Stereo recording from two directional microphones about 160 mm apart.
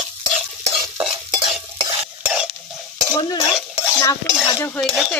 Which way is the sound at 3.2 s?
25° left (ahead or behind).